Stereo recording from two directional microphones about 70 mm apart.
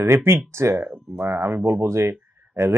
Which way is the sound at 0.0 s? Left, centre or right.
Right.